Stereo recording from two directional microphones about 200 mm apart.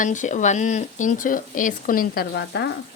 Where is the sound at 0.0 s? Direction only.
40° left (ahead or behind).